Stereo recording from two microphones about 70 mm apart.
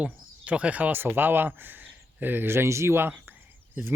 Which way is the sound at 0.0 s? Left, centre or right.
Centre.